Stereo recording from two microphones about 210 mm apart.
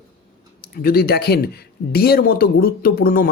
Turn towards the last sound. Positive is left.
turn(degrees=45)  # may be behind; listen again after turning